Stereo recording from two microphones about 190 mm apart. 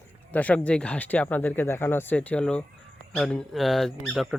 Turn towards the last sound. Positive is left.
turn(degrees=0)  # may be behind; listen again after turning